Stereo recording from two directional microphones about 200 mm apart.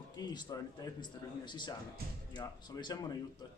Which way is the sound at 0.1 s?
20° left (ahead or behind).